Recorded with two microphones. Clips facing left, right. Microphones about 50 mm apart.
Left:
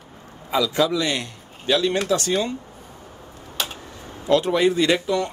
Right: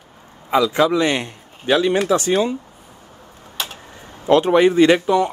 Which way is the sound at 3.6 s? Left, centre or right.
Centre.